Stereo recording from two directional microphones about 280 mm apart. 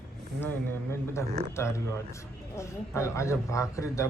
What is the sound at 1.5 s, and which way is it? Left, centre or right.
A man's voice, centre.